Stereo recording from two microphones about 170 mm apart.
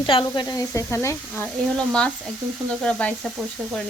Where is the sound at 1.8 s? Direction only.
5° left (ahead or behind).